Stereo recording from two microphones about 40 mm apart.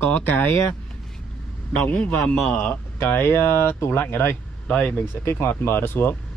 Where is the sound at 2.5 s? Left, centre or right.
Left.